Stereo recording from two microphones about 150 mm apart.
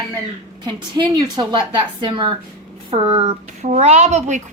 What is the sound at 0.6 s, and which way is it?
A woman's voice, 25° right (ahead or behind).